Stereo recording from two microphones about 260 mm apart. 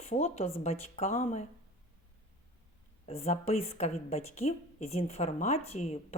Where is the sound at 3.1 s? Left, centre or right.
Left.